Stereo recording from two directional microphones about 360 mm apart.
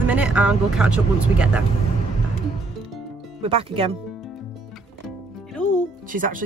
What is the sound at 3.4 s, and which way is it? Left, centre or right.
Speech, centre.